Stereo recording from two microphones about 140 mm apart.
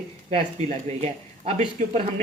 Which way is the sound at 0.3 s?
50° right (ahead or behind).